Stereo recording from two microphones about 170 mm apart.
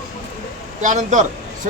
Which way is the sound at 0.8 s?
45° right (ahead or behind).